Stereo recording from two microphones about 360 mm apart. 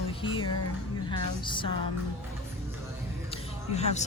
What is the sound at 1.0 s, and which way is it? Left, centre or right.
Speech, centre.